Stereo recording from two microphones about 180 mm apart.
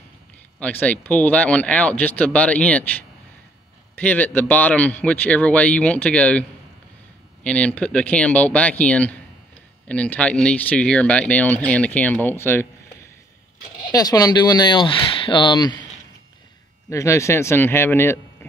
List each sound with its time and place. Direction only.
0.6 s speech: 10° left (ahead or behind)
7.4 s speech: 5° left (ahead or behind)
13.8 s speech: 20° left (ahead or behind)
16.9 s speech: 15° left (ahead or behind)